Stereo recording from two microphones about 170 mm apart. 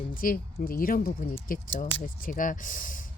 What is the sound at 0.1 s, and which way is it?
Speech, 55° left (ahead or behind).